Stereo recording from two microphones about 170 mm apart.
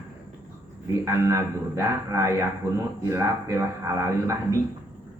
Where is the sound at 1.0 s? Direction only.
15° right (ahead or behind).